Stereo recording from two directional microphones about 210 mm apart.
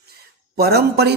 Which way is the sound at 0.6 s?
50° right (ahead or behind).